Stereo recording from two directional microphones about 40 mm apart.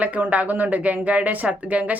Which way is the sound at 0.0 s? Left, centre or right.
Right.